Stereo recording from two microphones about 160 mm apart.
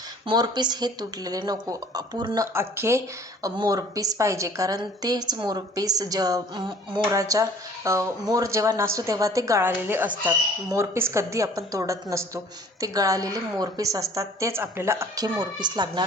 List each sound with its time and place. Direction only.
0.3 s a woman's voice: 25° right (ahead or behind)